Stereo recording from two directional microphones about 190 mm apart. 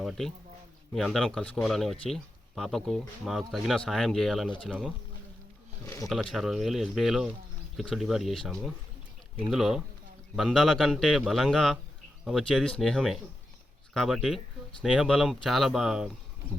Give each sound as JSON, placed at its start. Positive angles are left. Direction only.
{"t": 0.0, "sound": "a man's voice", "side_deg": 0}
{"t": 5.8, "sound": "speech", "side_deg": 20}
{"t": 6.1, "sound": "speech", "side_deg": 0}